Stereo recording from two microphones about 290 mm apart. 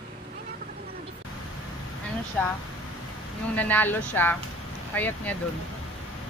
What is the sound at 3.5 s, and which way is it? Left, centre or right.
Speech, centre.